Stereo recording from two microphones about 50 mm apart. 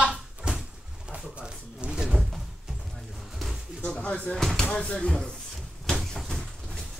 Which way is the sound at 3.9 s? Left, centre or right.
Left.